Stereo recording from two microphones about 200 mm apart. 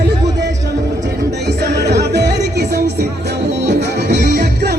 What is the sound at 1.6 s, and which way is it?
Music, 55° right (ahead or behind).